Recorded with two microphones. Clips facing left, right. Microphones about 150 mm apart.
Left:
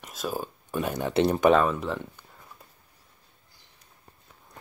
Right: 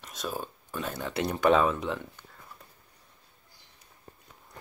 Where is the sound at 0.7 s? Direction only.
15° left (ahead or behind).